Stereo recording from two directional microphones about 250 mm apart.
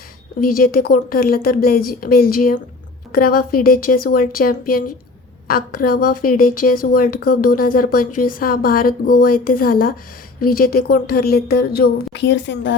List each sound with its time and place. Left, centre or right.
0.4 s a woman's voice: left